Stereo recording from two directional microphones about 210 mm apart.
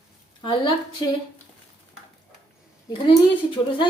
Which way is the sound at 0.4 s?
25° left (ahead or behind).